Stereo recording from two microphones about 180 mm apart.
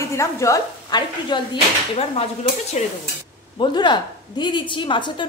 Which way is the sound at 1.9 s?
35° left (ahead or behind).